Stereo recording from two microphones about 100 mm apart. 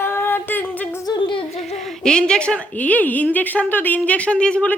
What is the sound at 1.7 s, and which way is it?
A woman's voice, centre (ahead or behind).